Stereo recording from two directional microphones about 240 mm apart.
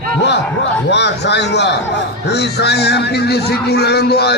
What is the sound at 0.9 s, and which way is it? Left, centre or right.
Speech, left.